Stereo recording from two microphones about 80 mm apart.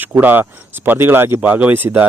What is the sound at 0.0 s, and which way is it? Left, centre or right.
Speech, right.